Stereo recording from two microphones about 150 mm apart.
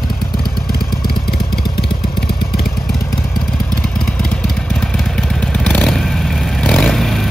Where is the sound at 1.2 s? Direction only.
90° left.